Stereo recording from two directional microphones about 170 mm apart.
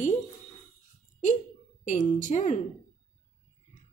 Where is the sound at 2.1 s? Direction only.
45° left (ahead or behind).